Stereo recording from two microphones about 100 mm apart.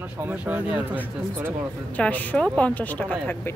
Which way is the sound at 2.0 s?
15° left (ahead or behind).